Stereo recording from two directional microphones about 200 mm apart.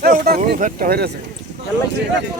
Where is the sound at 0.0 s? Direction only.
50° right (ahead or behind).